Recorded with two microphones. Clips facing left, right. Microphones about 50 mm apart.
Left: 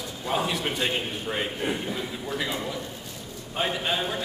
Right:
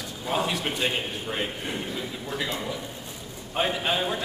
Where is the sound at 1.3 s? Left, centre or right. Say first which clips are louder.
Left 1 dB; centre.